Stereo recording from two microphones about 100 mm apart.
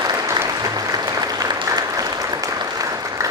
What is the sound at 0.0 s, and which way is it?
Applause, 40° right (ahead or behind).